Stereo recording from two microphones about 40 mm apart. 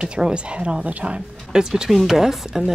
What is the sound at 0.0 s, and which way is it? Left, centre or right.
A woman's voice, right.